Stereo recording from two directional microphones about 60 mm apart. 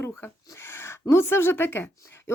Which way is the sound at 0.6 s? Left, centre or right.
Left.